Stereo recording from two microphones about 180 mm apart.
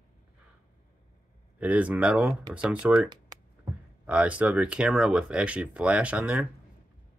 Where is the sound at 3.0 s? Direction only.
20° right (ahead or behind).